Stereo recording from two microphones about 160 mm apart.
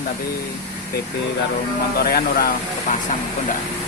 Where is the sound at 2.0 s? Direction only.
70° left (ahead or behind).